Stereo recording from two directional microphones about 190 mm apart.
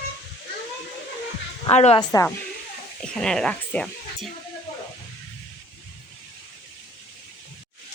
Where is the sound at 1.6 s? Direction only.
35° left (ahead or behind).